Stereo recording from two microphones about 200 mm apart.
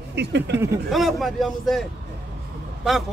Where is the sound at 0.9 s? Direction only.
Centre (ahead or behind).